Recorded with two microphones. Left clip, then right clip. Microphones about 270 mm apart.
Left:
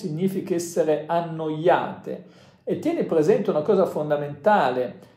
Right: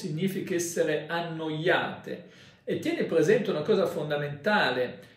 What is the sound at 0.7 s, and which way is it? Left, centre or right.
Speech, centre.